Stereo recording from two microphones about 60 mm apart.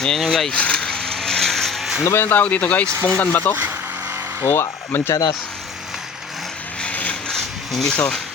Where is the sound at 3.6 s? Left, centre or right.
Right.